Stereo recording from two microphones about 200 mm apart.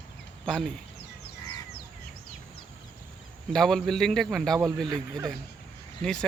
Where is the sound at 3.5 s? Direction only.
Centre (ahead or behind).